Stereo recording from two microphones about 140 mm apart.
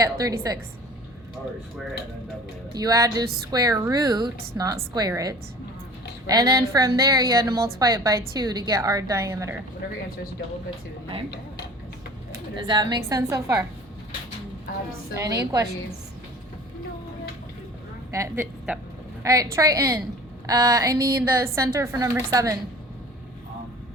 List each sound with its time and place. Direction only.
0.0 s a woman's voice: 25° right (ahead or behind)
2.7 s a woman's voice: 25° right (ahead or behind)
12.5 s a woman's voice: 30° right (ahead or behind)
15.1 s a woman's voice: 25° right (ahead or behind)
18.1 s a woman's voice: 20° right (ahead or behind)